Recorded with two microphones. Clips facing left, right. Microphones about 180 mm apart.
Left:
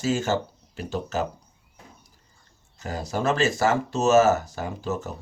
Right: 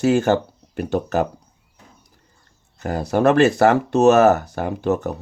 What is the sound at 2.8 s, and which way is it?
Speech, 60° right (ahead or behind).